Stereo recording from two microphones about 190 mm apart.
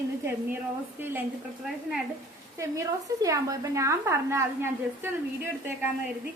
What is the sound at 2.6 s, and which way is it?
A woman's voice, 15° right (ahead or behind).